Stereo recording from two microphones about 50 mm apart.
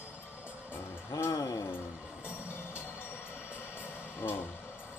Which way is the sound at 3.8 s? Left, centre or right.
Left.